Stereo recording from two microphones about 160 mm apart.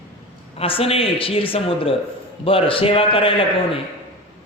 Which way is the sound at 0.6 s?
35° left (ahead or behind).